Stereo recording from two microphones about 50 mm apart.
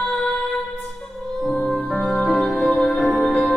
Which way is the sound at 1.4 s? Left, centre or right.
Centre.